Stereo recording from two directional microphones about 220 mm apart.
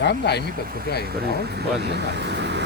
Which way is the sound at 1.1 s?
45° right (ahead or behind).